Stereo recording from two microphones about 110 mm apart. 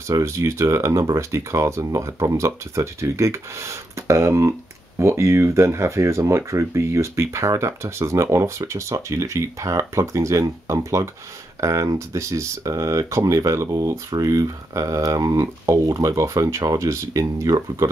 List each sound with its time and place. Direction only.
0.1 s speech: 25° right (ahead or behind)